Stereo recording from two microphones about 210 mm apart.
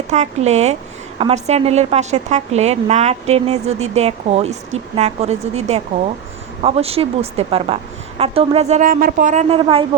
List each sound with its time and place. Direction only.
0.1 s a woman's voice: 30° right (ahead or behind)